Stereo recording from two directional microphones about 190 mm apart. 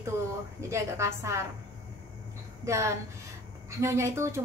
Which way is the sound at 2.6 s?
15° right (ahead or behind).